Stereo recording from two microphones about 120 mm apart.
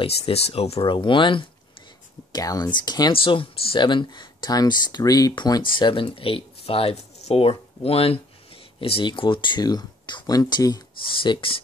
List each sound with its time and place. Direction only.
0.0 s speech: 55° left (ahead or behind)
2.3 s speech: 30° left (ahead or behind)
11.0 s speech: 45° left (ahead or behind)